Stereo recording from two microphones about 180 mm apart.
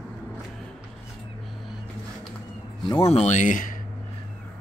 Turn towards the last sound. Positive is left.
turn(degrees=45)  # may be behind; listen again after turning